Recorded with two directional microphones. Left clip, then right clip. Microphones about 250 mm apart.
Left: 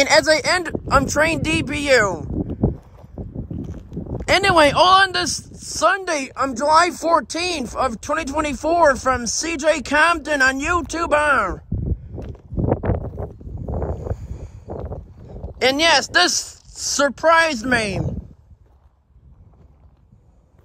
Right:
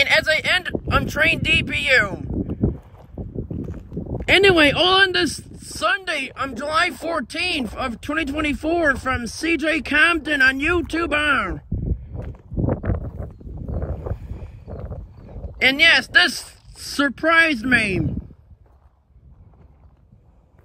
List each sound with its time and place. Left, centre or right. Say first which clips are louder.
0.0 s speech: left 2 dB; centre
3.6 s clip-clop: right 1 dB; centre
4.3 s speech: even; centre
12.6 s a sound: left 5 dB; centre
15.6 s speech: right 1 dB; centre